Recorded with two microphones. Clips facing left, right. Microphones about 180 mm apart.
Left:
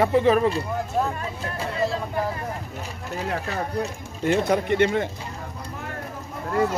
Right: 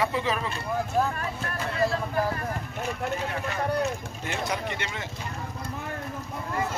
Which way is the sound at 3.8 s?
50° left (ahead or behind).